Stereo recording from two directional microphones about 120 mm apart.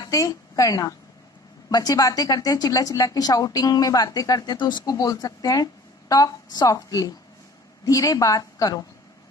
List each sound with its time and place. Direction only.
0.0 s a woman's voice: 30° left (ahead or behind)